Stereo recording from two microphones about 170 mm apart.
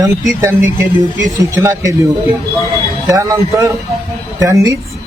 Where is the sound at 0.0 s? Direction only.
15° right (ahead or behind).